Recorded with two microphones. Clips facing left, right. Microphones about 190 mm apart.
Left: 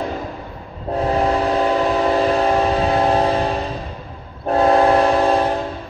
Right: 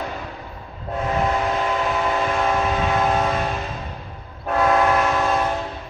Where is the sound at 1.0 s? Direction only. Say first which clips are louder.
Left 4 dB; 35° left (ahead or behind).